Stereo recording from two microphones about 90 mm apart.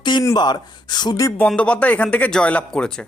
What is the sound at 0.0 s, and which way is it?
Gasp, 55° left (ahead or behind).